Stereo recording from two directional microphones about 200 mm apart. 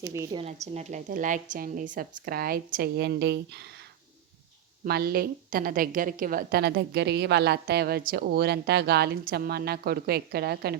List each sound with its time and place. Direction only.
0.0 s a woman's voice: 15° right (ahead or behind)
0.4 s a woman's voice: 35° right (ahead or behind); by 3.7 s 55° right (ahead or behind)
4.8 s a woman's voice: 50° right (ahead or behind)